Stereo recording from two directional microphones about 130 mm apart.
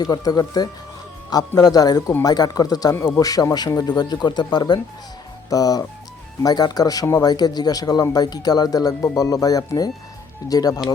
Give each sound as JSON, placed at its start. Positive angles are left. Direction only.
{"t": 0.0, "sound": "a man's voice", "side_deg": 30}